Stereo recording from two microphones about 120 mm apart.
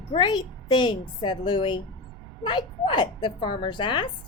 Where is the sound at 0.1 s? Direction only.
40° left (ahead or behind).